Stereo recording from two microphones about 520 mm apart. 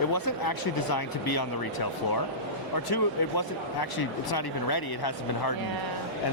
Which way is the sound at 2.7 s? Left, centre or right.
Left.